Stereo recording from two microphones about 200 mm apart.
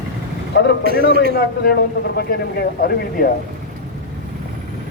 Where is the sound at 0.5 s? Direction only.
55° left (ahead or behind).